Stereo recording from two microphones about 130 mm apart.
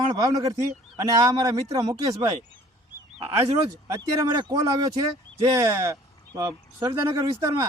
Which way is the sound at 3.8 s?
25° right (ahead or behind).